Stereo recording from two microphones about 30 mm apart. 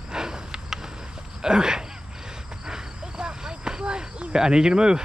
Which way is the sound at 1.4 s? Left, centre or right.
Right.